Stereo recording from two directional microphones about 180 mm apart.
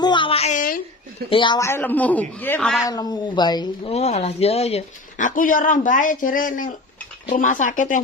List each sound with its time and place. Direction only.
0.0 s a sound: 25° left (ahead or behind); by 0.8 s 45° left (ahead or behind)
1.3 s speech: 25° left (ahead or behind)
1.6 s a man's voice: 10° left (ahead or behind)
2.8 s speech: 20° left (ahead or behind)
3.9 s speech: 35° left (ahead or behind)